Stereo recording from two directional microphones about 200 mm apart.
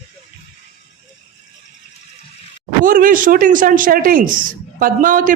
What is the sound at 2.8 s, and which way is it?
Speech, 45° right (ahead or behind).